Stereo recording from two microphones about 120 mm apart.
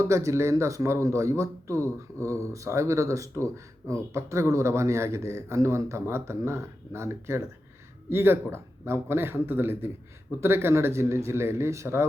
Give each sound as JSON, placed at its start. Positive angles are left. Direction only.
{"t": 0.0, "sound": "speech", "side_deg": -25}